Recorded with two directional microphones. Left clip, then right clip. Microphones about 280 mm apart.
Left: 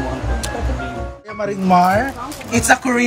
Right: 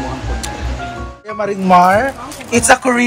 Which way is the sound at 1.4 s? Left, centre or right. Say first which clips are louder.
Right 4 dB; centre.